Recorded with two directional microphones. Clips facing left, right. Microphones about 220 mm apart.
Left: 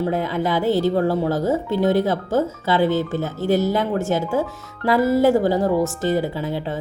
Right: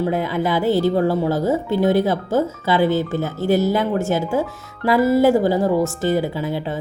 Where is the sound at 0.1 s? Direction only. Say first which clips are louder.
Right 1 dB; 10° right (ahead or behind).